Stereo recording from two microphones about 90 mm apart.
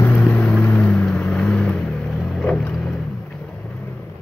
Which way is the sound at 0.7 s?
10° left (ahead or behind).